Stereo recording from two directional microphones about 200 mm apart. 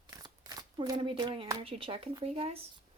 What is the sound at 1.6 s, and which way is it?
Speech, 25° right (ahead or behind).